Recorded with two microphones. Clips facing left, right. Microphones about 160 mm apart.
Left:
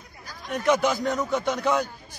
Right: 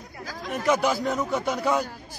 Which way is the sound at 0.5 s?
5° right (ahead or behind).